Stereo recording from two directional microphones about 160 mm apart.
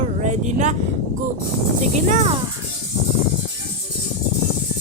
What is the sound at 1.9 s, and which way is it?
Speech, 50° right (ahead or behind).